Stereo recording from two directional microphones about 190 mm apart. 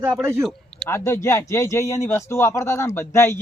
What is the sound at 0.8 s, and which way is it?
Speech, 15° left (ahead or behind).